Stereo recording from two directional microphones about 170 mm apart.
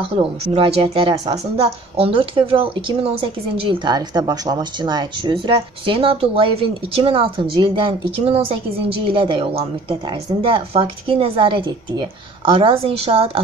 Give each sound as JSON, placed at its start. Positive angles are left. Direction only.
{"t": 0.0, "sound": "a woman's voice", "side_deg": -30}
{"t": 1.6, "sound": "a woman's voice", "side_deg": -35}